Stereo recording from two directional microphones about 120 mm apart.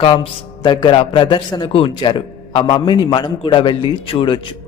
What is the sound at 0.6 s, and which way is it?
A man's voice, 35° left (ahead or behind).